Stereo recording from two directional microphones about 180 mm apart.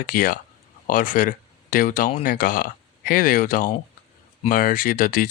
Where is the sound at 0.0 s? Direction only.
50° left (ahead or behind).